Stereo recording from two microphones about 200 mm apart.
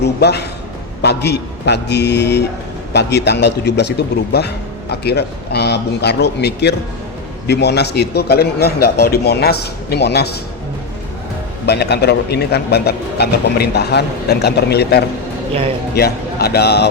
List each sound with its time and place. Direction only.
0.0 s a man's voice: 55° left (ahead or behind)
11.6 s speech: 55° left (ahead or behind)